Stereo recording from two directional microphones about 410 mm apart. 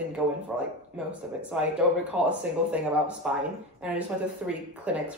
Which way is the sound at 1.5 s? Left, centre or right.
Centre.